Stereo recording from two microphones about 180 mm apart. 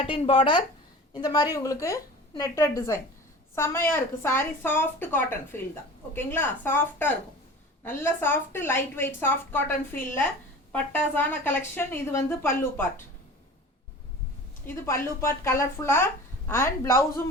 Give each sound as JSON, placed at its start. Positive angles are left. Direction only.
{"t": 0.0, "sound": "a woman's voice", "side_deg": 35}
{"t": 14.7, "sound": "a woman's voice", "side_deg": 10}